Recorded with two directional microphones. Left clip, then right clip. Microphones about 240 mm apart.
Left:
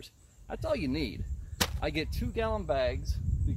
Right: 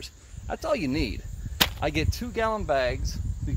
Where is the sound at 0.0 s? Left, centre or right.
Right.